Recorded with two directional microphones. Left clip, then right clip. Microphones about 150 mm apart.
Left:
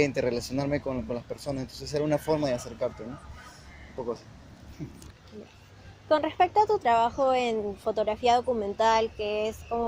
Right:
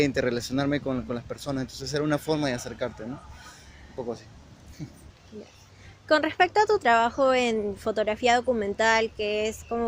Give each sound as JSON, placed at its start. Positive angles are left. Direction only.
{"t": 0.0, "sound": "speech", "side_deg": -50}
{"t": 4.8, "sound": "speech", "side_deg": -45}
{"t": 6.1, "sound": "speech", "side_deg": -55}